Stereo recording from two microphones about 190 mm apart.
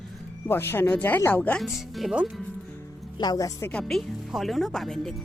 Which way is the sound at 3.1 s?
20° left (ahead or behind).